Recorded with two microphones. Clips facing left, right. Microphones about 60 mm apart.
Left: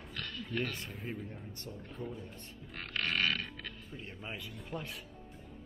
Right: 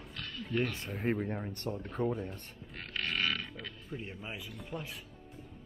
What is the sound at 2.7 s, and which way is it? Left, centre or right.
Burping, centre.